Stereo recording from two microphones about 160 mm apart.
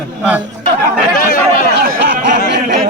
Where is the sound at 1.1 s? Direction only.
60° left (ahead or behind).